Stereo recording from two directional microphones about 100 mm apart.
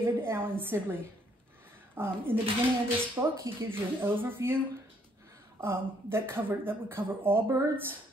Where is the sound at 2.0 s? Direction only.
25° right (ahead or behind).